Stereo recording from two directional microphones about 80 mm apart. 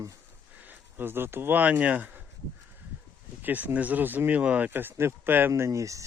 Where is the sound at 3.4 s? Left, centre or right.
Centre.